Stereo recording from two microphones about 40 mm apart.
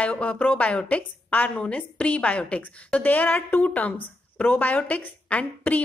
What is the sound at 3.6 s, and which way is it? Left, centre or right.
A woman's voice, left.